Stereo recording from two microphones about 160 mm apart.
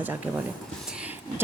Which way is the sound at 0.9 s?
10° right (ahead or behind).